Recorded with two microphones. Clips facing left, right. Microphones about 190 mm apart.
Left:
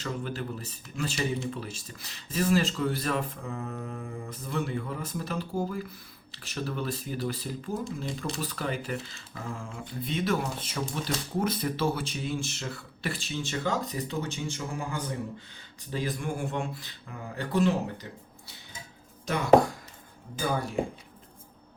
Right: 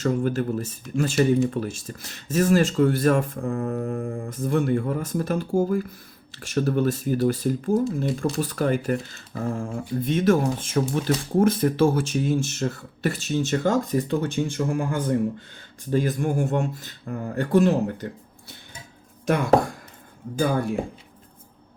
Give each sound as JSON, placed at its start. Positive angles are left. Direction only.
{"t": 0.0, "sound": "speech", "side_deg": -45}